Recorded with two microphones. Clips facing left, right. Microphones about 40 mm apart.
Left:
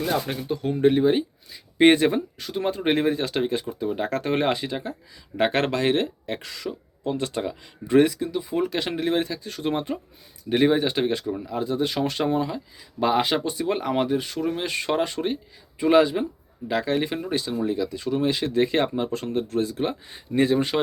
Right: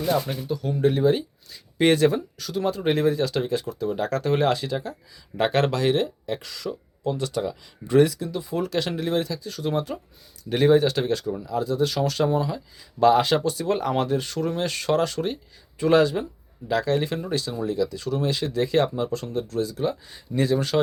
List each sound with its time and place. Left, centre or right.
0.0 s speech: left
10.5 s speech: centre